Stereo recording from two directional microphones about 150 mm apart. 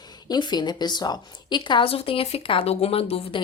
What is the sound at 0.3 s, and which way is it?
A woman's voice, 30° left (ahead or behind).